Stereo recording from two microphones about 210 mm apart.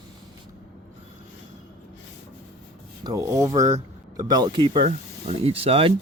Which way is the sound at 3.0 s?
20° right (ahead or behind).